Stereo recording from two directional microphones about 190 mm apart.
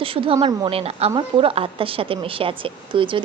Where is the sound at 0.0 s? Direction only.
30° right (ahead or behind).